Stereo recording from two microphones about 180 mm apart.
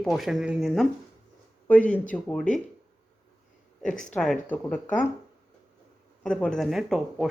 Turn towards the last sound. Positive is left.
turn(degrees=0)  # may be behind; listen again after turning